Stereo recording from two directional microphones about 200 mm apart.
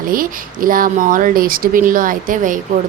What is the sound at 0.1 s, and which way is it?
A woman's voice, 45° right (ahead or behind).